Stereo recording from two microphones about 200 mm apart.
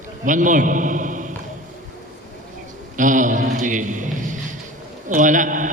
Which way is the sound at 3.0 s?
40° right (ahead or behind).